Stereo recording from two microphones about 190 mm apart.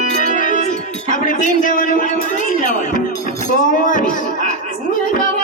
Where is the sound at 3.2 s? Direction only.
45° left (ahead or behind).